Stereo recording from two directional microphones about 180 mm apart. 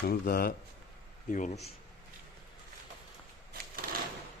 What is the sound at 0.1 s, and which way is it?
Speech, 55° left (ahead or behind).